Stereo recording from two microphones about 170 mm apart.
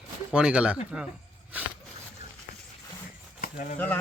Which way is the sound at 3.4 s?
55° left (ahead or behind).